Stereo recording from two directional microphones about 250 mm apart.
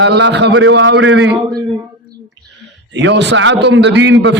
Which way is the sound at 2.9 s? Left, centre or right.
Right.